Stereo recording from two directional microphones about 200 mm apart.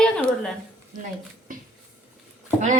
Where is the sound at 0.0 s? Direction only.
5° left (ahead or behind).